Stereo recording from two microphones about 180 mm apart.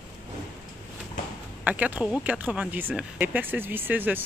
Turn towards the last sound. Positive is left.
turn(degrees=-10)  # may be behind; listen again after turning